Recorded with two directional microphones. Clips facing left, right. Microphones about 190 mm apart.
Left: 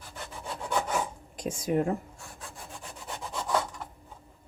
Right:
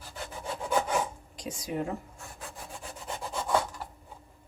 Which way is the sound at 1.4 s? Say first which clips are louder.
Left 6 dB; 50° left (ahead or behind).